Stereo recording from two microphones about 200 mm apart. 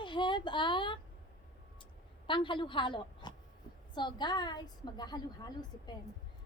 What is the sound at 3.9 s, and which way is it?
Speech, 20° left (ahead or behind).